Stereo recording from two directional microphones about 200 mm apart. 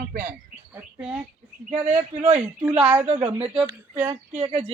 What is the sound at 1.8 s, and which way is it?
Speech, 30° right (ahead or behind).